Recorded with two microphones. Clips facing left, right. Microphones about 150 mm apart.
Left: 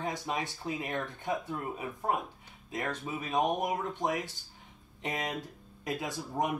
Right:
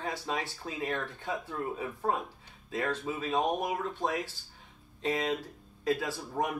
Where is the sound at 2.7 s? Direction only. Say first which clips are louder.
Right 3 dB; 15° left (ahead or behind).